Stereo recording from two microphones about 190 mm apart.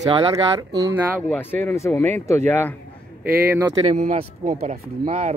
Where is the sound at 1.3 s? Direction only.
10° left (ahead or behind).